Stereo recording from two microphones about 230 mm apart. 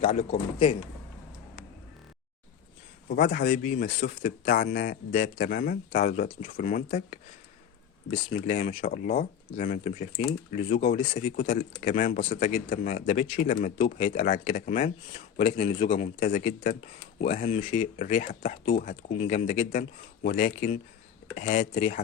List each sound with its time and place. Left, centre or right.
0.0 s speech: left
3.1 s speech: left